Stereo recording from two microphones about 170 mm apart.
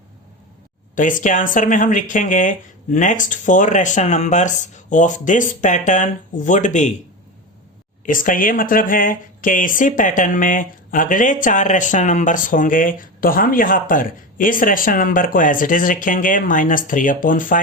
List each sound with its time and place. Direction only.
0.9 s speech: 50° left (ahead or behind)
8.0 s speech: 50° left (ahead or behind)